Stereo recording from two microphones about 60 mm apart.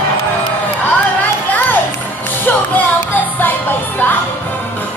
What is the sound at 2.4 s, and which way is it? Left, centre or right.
Music, left.